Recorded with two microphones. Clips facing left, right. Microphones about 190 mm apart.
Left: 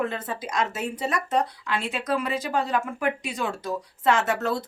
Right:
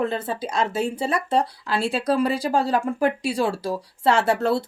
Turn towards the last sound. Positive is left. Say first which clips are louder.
# right 4 dB
turn(degrees=-30)  # may be behind; listen again after turning